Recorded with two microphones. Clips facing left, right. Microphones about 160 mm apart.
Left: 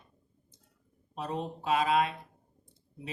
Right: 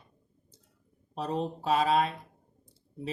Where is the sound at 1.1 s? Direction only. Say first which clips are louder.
Right 4 dB; 35° right (ahead or behind).